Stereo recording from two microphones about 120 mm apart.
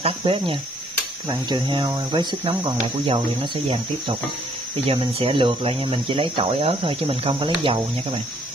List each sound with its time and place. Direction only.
0.0 s speech: 50° right (ahead or behind)
4.8 s speech: 55° right (ahead or behind)